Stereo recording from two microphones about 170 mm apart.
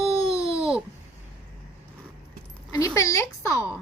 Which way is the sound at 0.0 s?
35° right (ahead or behind).